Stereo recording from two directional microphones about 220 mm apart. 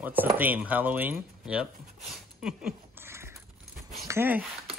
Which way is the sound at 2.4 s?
5° right (ahead or behind).